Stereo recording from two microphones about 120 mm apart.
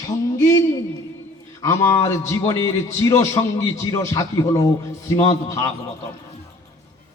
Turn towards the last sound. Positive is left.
turn(degrees=25)  # may be behind; listen again after turning